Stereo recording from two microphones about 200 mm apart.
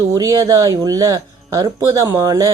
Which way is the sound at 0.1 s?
15° right (ahead or behind).